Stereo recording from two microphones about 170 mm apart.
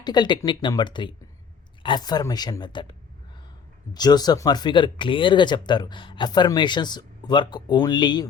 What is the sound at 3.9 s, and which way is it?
A woman's voice, 25° left (ahead or behind).